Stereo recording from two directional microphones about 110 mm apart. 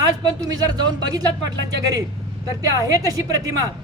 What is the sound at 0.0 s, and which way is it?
Speech, 35° right (ahead or behind).